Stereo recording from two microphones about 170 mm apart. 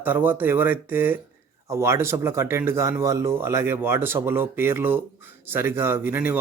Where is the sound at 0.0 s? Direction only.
10° right (ahead or behind).